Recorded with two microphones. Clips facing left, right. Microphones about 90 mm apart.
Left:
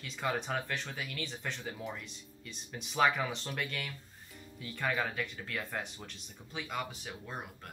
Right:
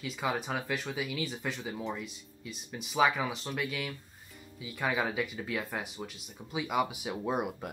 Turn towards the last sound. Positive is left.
turn(degrees=-80)